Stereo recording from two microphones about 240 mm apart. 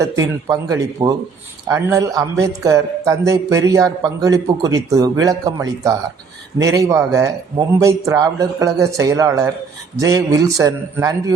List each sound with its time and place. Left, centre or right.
0.4 s a man's voice: centre